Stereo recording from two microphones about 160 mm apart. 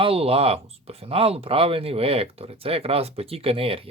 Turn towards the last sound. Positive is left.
turn(degrees=-35)  # may be behind; listen again after turning